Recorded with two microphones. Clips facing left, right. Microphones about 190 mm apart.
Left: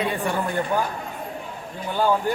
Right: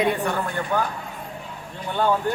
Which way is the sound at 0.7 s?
10° left (ahead or behind).